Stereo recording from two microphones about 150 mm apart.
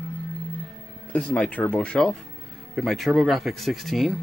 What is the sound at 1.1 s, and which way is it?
Speech, 10° left (ahead or behind).